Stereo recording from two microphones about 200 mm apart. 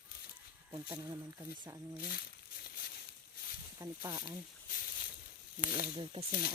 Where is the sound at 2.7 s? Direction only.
50° left (ahead or behind).